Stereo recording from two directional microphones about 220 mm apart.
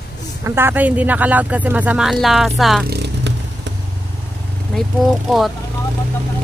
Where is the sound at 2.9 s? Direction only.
50° right (ahead or behind).